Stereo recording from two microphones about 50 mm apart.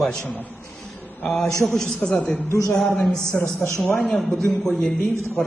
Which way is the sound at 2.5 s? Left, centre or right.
Left.